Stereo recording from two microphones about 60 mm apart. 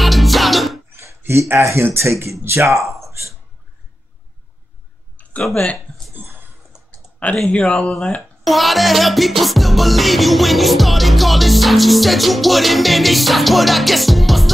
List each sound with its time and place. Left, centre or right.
0.0 s music: centre
0.9 s a sound: right
1.8 s speech: right
3.1 s a sound: right
5.4 s music: centre
6.2 s a sound: right
7.2 s speech: left
7.5 s speech: centre
8.5 s music: centre